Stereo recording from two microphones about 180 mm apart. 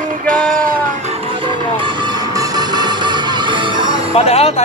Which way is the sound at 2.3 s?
20° right (ahead or behind).